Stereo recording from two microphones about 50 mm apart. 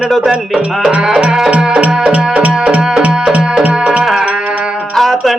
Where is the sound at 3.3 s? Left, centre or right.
Right.